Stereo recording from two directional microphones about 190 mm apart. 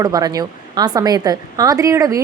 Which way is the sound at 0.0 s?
20° right (ahead or behind).